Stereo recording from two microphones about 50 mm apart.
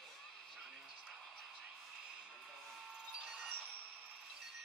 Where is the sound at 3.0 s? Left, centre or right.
Centre.